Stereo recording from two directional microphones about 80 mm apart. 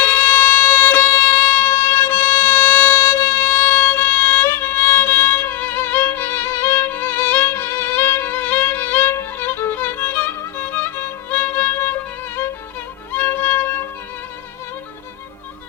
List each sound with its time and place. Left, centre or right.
0.0 s music: left
3.0 s music: left
3.3 s music: left
13.1 s violin: left